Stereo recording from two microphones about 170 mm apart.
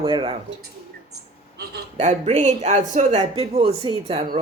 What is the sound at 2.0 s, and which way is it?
Speech, 45° right (ahead or behind).